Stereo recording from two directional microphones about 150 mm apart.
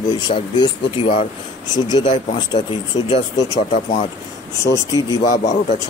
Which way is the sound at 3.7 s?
60° left (ahead or behind).